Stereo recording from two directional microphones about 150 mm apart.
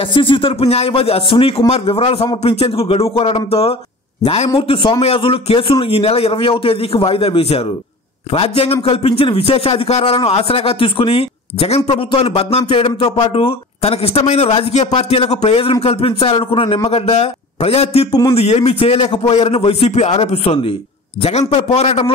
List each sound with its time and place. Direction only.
0.1 s a man's voice: 35° left (ahead or behind)